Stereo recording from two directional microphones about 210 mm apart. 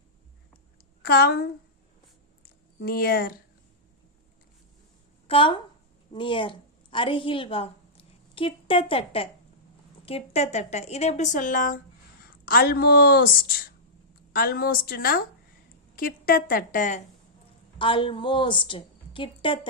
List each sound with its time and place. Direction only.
1.0 s a woman's voice: 45° left (ahead or behind)
2.8 s a woman's voice: 45° left (ahead or behind)
5.3 s a woman's voice: 25° left (ahead or behind); by 13.3 s 45° left (ahead or behind)
14.3 s a woman's voice: 45° left (ahead or behind)
17.7 s a woman's voice: 25° left (ahead or behind)